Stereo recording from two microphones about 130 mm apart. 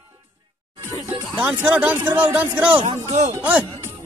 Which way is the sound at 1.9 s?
20° right (ahead or behind).